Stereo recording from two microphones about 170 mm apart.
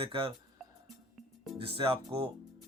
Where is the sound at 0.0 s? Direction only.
30° right (ahead or behind).